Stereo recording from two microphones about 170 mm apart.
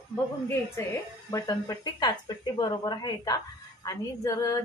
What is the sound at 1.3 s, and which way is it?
A woman's voice, 25° left (ahead or behind).